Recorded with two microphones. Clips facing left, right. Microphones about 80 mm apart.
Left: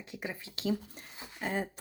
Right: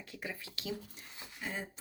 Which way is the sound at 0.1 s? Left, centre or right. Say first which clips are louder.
Left 3 dB; left.